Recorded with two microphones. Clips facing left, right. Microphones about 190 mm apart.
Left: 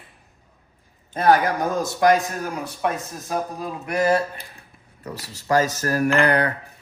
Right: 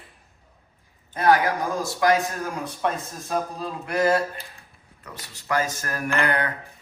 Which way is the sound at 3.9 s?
25° left (ahead or behind).